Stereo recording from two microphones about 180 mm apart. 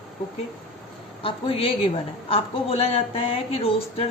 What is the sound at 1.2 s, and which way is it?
Speech, 30° left (ahead or behind).